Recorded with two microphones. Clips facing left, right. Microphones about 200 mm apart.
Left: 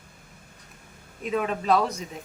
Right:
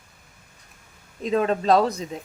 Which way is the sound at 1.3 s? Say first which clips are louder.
Right 4 dB; 30° right (ahead or behind).